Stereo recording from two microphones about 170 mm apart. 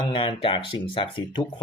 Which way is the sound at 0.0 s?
30° left (ahead or behind).